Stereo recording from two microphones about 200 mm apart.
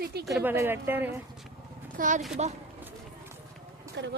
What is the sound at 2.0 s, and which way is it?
Speech, 40° right (ahead or behind).